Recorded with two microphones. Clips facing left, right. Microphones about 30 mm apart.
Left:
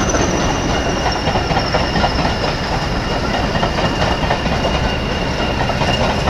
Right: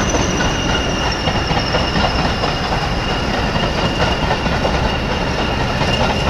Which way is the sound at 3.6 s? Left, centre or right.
Centre.